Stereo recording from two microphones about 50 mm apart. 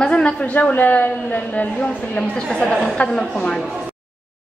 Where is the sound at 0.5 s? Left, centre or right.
Left.